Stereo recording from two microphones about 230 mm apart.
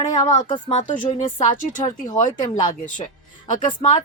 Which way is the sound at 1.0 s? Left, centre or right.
Left.